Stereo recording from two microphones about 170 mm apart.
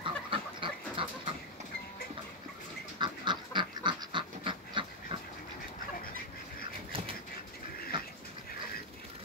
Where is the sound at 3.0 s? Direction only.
25° right (ahead or behind).